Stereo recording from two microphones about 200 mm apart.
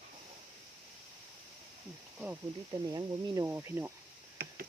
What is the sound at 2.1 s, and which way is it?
Speech, 10° right (ahead or behind).